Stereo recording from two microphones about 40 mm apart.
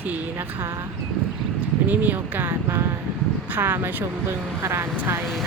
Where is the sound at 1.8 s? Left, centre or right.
Right.